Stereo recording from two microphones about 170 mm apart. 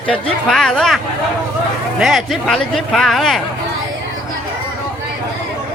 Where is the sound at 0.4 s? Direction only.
5° left (ahead or behind).